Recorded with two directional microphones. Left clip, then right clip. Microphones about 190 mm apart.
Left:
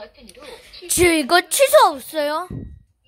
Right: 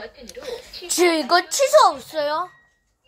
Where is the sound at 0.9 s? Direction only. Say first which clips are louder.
Left 2 dB; 30° left (ahead or behind).